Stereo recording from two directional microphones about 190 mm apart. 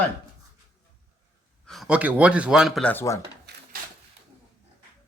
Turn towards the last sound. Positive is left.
turn(degrees=-60)  # may be behind; listen again after turning